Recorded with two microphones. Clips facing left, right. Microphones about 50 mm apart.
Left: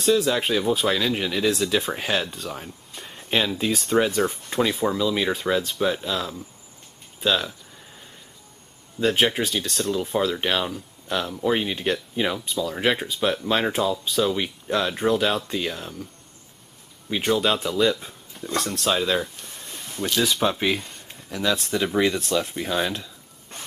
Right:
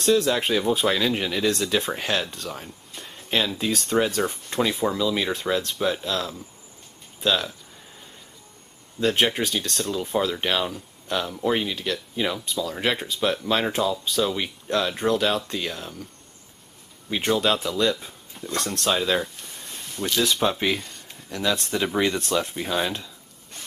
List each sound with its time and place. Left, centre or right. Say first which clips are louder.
0.0 s speech: even; centre
9.0 s speech: left 1 dB; centre
11.6 s speech: left 3 dB; left
12.4 s speech: left 1 dB; centre
17.1 s speech: even; centre